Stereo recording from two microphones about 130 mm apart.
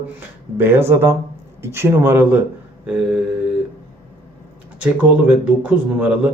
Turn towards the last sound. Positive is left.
turn(degrees=-10)  # may be behind; listen again after turning